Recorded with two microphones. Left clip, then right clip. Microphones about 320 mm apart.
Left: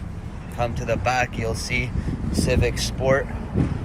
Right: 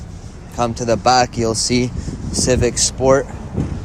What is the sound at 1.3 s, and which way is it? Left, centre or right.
Speech, centre.